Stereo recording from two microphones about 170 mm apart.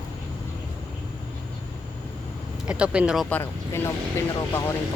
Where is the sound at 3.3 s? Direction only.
15° left (ahead or behind).